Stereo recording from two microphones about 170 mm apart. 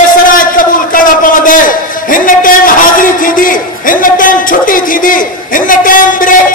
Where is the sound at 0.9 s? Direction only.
50° left (ahead or behind).